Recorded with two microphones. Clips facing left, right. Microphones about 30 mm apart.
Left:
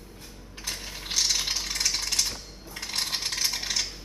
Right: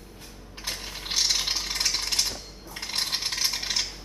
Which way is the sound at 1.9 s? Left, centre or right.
Centre.